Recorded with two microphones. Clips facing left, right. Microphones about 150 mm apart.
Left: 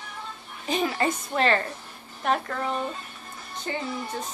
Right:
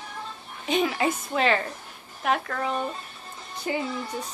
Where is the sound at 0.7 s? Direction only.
Centre (ahead or behind).